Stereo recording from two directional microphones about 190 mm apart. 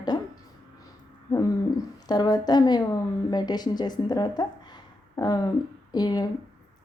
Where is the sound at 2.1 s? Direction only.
20° left (ahead or behind).